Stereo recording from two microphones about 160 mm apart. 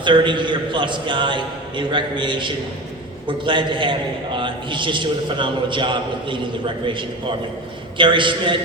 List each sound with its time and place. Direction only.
0.0 s a man's voice: 30° right (ahead or behind)